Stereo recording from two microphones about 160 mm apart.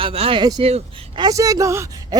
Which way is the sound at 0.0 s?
35° right (ahead or behind).